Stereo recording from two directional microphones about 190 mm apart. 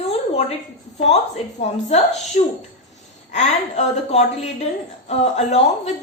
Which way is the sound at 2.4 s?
35° left (ahead or behind).